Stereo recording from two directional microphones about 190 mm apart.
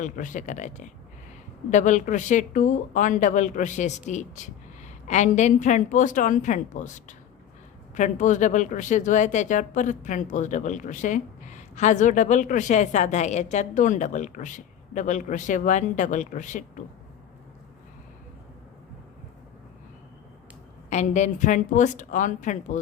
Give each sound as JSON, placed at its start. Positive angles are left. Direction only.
{"t": 0.0, "sound": "speech", "side_deg": 45}
{"t": 20.9, "sound": "speech", "side_deg": 40}